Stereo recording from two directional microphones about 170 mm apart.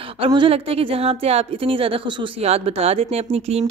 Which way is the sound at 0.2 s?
30° right (ahead or behind).